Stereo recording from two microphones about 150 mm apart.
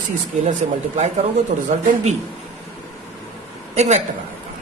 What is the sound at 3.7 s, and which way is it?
Speech, 45° right (ahead or behind).